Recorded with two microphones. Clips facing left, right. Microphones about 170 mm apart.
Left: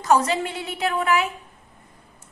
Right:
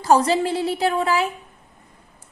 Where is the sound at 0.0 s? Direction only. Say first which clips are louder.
Right 3 dB; 30° right (ahead or behind).